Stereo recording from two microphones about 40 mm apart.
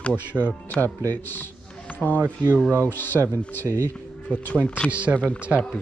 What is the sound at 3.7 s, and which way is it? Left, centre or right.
Speech, right.